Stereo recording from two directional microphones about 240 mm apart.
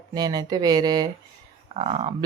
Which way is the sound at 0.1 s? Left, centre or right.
Centre.